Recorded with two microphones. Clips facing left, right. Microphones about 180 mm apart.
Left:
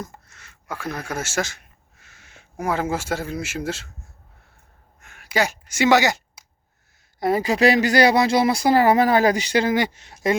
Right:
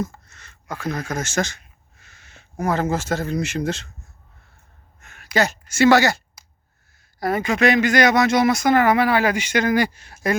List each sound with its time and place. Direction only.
0.1 s a sound: 10° left (ahead or behind)
0.8 s speech: 10° left (ahead or behind)
4.9 s speech: 10° left (ahead or behind)
7.2 s speech: 30° left (ahead or behind)